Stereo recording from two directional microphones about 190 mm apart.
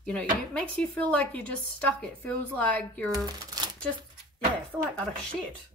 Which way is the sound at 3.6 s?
20° right (ahead or behind).